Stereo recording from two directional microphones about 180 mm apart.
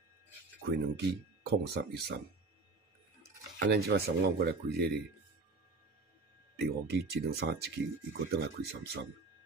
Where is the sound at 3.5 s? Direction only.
60° right (ahead or behind).